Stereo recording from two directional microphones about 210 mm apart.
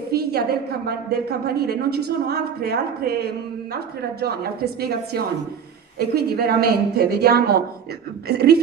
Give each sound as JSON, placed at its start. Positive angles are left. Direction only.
{"t": 0.1, "sound": "a woman's voice", "side_deg": -50}